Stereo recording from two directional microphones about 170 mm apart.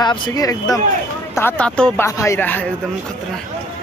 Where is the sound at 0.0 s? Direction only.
20° left (ahead or behind).